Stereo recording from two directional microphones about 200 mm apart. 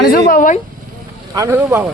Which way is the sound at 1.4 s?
15° right (ahead or behind).